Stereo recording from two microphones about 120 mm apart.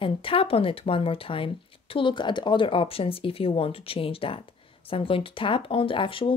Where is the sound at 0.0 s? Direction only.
50° left (ahead or behind).